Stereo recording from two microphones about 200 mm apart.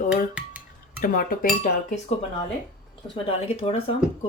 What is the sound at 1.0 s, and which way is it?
Cutlery, 45° left (ahead or behind).